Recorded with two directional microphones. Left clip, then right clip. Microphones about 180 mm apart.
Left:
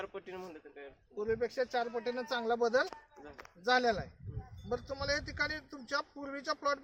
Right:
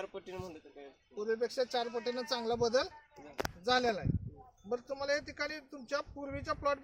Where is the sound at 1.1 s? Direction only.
10° left (ahead or behind).